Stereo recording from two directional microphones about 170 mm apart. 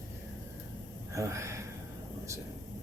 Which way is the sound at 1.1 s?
15° right (ahead or behind).